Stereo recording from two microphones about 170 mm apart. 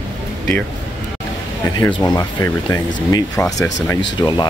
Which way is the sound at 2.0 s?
20° left (ahead or behind).